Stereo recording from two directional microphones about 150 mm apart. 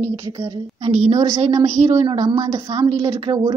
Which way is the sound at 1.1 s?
25° right (ahead or behind).